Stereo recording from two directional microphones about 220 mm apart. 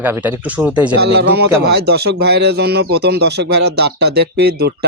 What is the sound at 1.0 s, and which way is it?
Speech, 45° right (ahead or behind).